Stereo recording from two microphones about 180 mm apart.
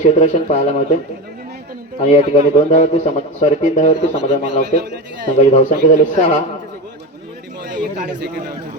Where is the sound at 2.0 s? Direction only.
40° left (ahead or behind).